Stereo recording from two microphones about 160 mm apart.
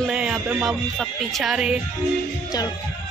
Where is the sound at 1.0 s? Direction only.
Centre (ahead or behind).